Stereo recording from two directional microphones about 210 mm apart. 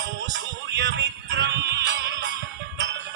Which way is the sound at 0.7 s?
55° right (ahead or behind).